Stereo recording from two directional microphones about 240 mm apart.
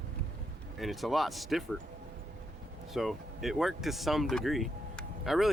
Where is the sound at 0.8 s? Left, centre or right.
Centre.